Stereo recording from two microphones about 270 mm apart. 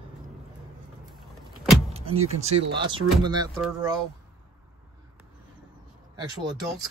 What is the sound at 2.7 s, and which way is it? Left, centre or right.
Speech, centre.